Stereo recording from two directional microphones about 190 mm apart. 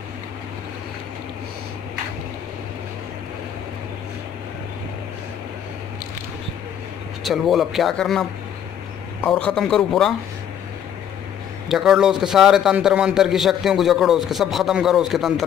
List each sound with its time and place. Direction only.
7.2 s a man's voice: centre (ahead or behind)
11.7 s a man's voice: centre (ahead or behind)